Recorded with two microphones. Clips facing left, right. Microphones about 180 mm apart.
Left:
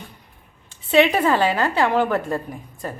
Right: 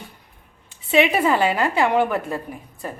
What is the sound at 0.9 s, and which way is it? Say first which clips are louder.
A woman's voice: left 1 dB; 10° right (ahead or behind).